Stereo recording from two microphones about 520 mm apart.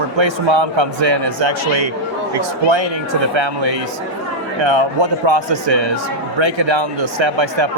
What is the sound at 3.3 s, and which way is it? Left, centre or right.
A man's voice, right.